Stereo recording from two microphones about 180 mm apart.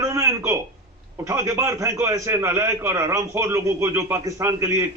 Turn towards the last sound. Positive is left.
turn(degrees=-15)  # may be behind; listen again after turning